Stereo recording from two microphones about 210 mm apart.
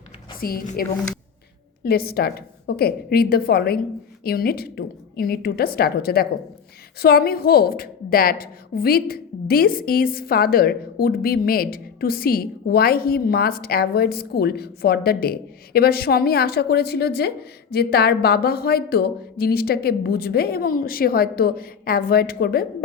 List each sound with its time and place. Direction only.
0.3 s a woman's voice: 45° left (ahead or behind)